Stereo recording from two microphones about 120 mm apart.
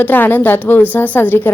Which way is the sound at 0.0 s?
15° left (ahead or behind).